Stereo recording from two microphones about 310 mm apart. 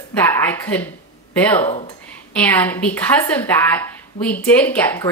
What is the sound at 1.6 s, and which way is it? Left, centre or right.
Speech, centre.